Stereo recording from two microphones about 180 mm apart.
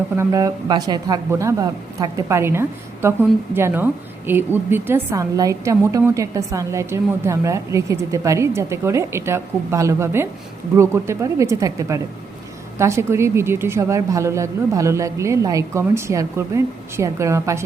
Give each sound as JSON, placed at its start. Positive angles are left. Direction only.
{"t": 0.2, "sound": "a woman's voice", "side_deg": -20}